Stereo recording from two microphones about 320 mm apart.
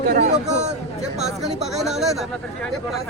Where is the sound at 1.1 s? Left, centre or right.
Centre.